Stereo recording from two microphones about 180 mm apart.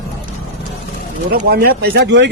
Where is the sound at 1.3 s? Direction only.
55° right (ahead or behind); by 2.3 s 80° right.